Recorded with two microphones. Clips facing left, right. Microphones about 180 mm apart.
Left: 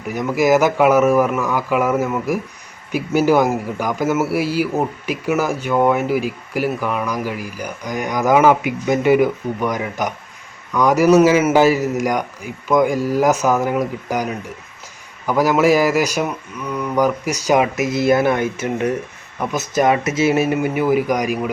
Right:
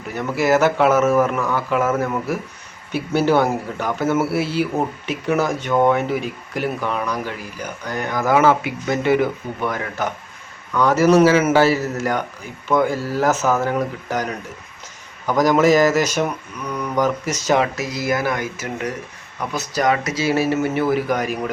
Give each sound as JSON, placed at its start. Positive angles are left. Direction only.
{"t": 0.1, "sound": "a man's voice", "side_deg": 15}